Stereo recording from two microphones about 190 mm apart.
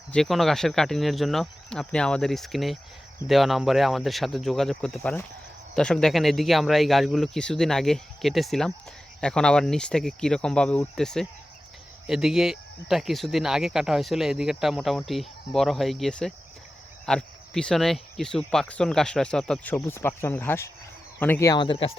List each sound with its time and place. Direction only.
0.1 s speech: centre (ahead or behind); by 21.9 s 30° left (ahead or behind)